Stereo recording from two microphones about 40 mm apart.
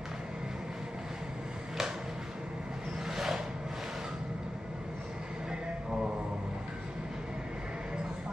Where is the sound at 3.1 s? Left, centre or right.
Centre.